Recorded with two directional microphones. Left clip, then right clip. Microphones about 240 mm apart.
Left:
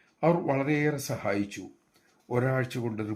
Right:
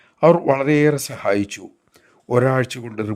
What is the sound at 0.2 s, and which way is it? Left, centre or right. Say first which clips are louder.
Speech: right 11 dB; right.